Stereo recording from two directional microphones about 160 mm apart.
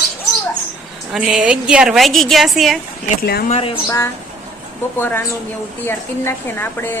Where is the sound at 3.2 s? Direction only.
75° left (ahead or behind).